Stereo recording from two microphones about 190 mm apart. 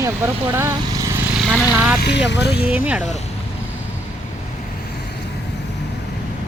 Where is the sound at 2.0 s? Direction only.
60° left (ahead or behind).